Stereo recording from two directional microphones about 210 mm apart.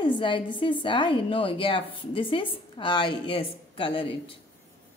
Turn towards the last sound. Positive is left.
turn(degrees=25)  # may be behind; listen again after turning